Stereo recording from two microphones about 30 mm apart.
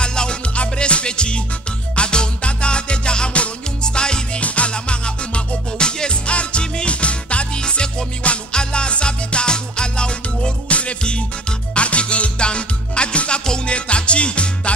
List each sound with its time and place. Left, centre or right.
0.0 s music: left
0.6 s music: left
4.4 s music: left
4.6 s music: left
6.2 s music: left
7.5 s music: left
10.7 s music: left